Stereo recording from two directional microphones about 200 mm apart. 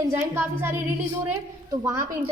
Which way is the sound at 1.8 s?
15° right (ahead or behind).